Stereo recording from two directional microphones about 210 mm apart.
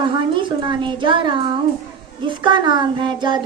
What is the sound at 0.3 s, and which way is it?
A woman's voice, 20° right (ahead or behind).